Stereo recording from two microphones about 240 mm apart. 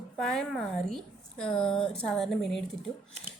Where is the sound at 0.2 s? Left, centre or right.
Centre.